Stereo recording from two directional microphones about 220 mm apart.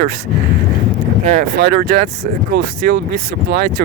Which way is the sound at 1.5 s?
45° right (ahead or behind).